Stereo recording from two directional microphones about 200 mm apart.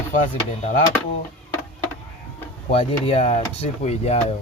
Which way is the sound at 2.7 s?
30° left (ahead or behind).